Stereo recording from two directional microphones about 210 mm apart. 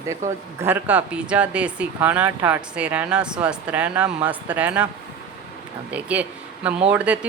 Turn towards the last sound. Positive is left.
turn(degrees=-5)  # may be behind; listen again after turning